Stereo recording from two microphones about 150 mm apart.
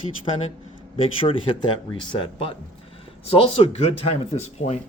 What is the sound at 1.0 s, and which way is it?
Speech, 35° left (ahead or behind).